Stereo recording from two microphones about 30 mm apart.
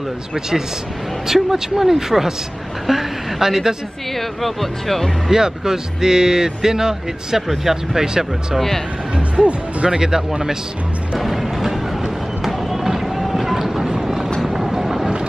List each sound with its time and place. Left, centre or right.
1.2 s a woman's voice: centre
4.4 s speech: centre
5.3 s speech: right
7.4 s speech: centre
8.0 s speech: right
9.4 s speech: right
9.8 s speech: right
11.1 s music: centre
12.4 s vehicle: centre